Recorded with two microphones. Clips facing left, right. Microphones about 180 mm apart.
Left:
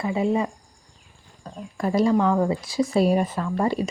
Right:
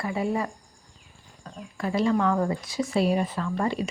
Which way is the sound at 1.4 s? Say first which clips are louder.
Left 4 dB; 40° left (ahead or behind).